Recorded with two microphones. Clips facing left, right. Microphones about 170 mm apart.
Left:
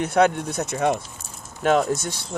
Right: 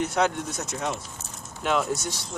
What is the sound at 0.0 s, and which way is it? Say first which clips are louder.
Speech: left 5 dB; 60° left (ahead or behind).